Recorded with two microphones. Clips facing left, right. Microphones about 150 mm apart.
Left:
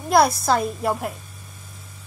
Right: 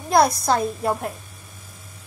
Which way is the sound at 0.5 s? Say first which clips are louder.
Even; centre (ahead or behind).